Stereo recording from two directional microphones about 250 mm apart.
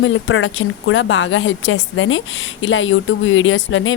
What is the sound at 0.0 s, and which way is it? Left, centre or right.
A woman's voice, left.